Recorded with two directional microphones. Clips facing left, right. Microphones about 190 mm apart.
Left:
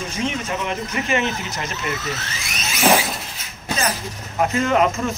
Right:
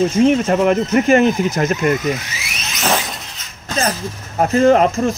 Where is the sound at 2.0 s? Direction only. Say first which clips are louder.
Right 8 dB; 15° right (ahead or behind).